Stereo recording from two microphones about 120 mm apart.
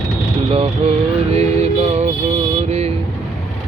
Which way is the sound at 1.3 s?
60° right (ahead or behind).